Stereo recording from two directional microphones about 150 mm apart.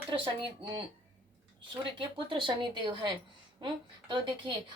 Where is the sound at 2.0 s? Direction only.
35° right (ahead or behind).